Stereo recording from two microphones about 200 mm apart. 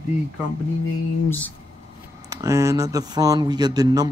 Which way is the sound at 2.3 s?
15° right (ahead or behind).